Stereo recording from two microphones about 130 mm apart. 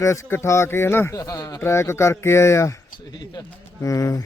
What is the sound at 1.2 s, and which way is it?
Speech, 30° left (ahead or behind).